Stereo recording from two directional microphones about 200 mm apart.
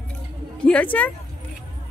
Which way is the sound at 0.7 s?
5° left (ahead or behind).